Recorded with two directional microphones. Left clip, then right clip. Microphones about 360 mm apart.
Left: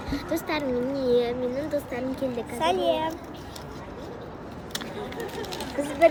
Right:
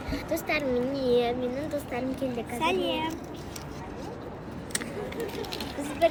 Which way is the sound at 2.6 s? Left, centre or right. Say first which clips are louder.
Left 4 dB; centre.